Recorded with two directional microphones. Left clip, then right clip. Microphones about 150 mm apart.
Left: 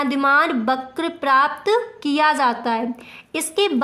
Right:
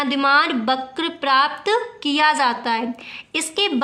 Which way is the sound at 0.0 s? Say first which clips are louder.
Even; 50° left (ahead or behind).